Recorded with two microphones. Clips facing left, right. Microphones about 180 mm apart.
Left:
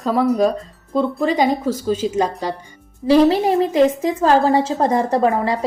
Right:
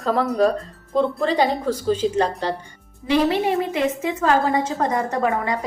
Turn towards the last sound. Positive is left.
turn(degrees=30)  # may be behind; listen again after turning